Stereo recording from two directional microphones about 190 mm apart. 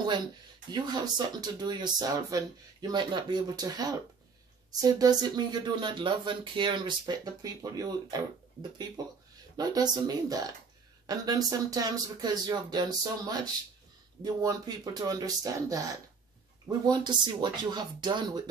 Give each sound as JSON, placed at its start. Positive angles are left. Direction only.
{"t": 0.7, "sound": "speech", "side_deg": -20}
{"t": 9.6, "sound": "speech", "side_deg": -20}